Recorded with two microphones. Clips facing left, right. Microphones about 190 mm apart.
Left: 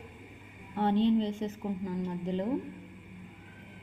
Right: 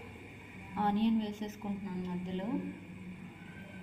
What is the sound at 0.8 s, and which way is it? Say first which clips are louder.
Speech: left 4 dB; 25° left (ahead or behind).